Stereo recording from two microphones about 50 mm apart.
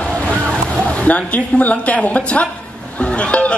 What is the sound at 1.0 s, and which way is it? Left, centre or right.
Speech, left.